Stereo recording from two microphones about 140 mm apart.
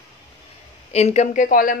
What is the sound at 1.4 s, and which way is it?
Speech, 80° left.